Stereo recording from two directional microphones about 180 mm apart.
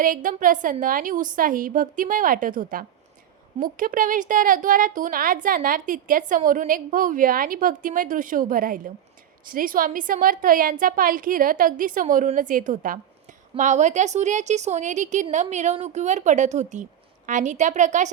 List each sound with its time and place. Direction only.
0.0 s a woman's voice: 50° right (ahead or behind)